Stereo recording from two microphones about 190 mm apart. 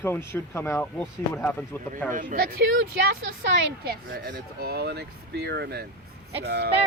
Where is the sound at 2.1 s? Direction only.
45° right (ahead or behind).